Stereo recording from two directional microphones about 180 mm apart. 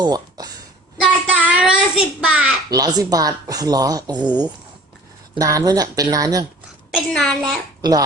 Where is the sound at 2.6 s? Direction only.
20° right (ahead or behind).